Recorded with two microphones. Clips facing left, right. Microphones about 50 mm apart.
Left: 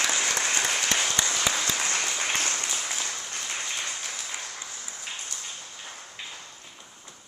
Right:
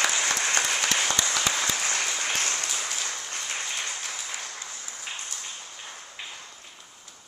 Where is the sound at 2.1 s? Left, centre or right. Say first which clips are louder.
Even; centre.